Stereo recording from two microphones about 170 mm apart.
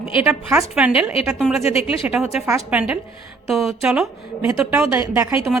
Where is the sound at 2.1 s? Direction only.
5° right (ahead or behind).